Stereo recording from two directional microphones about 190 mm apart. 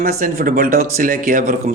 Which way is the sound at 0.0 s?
50° right (ahead or behind).